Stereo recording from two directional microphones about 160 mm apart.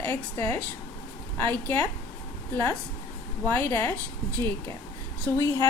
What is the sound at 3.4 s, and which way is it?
Speech, 10° left (ahead or behind).